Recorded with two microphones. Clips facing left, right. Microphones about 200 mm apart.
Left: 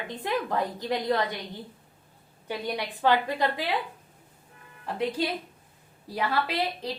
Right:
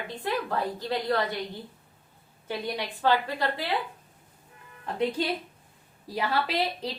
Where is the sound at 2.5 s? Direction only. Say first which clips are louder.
Even; 15° left (ahead or behind).